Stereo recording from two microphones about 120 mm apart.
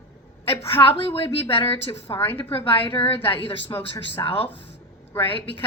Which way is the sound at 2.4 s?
45° left (ahead or behind).